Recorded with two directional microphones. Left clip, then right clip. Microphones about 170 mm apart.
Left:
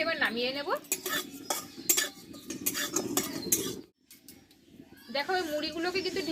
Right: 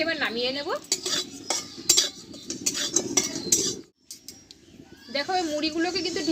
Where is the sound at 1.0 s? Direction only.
5° left (ahead or behind).